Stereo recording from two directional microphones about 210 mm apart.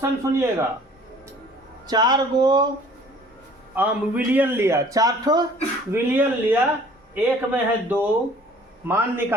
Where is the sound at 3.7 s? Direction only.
5° right (ahead or behind).